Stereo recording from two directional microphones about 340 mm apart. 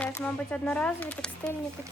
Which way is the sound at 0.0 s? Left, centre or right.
Centre.